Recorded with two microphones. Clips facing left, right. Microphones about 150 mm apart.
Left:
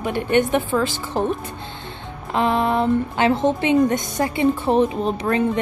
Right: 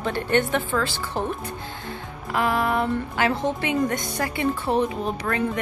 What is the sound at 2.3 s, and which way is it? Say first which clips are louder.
A woman's voice: left 3 dB; 25° left (ahead or behind).